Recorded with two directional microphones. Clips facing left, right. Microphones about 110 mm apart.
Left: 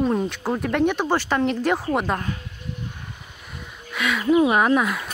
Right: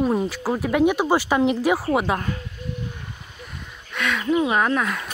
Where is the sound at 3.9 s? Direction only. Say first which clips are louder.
Left 2 dB; 5° left (ahead or behind).